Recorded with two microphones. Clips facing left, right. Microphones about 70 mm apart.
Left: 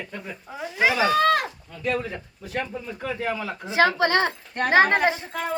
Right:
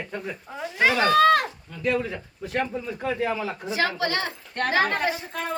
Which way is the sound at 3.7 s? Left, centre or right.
Left.